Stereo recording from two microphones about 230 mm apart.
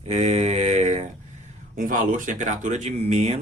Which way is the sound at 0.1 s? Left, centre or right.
Right.